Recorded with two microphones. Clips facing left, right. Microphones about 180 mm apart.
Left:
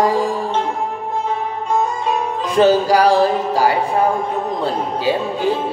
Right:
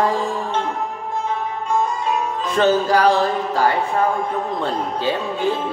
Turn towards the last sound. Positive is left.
turn(degrees=10)  # may be behind; listen again after turning